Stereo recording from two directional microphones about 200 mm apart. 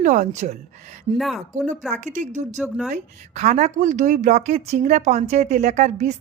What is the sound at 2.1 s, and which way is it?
Speech, 35° right (ahead or behind).